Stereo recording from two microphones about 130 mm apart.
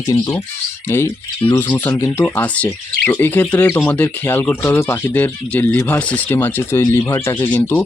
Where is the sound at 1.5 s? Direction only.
15° left (ahead or behind).